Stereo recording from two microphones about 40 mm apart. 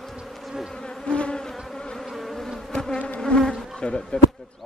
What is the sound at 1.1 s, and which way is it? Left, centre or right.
Insect, left.